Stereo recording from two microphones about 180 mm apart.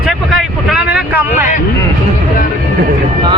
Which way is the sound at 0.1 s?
Centre (ahead or behind).